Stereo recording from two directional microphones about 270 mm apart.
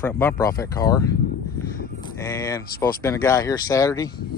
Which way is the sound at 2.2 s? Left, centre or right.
Centre.